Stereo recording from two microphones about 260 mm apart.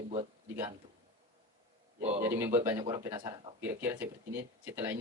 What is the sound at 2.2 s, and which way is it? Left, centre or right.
Speech, centre.